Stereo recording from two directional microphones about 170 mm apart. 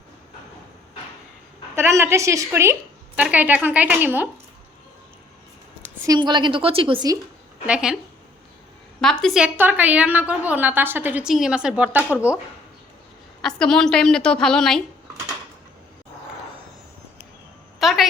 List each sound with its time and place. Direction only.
1.7 s a woman's voice: 15° right (ahead or behind)
6.1 s a woman's voice: 25° right (ahead or behind)
7.7 s a woman's voice: 5° right (ahead or behind)
9.0 s a woman's voice: 5° left (ahead or behind)
9.6 s a woman's voice: 10° right (ahead or behind)
13.4 s a woman's voice: 5° left (ahead or behind)
17.7 s a sound: centre (ahead or behind)